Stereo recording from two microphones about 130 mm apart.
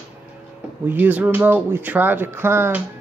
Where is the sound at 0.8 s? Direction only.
15° right (ahead or behind).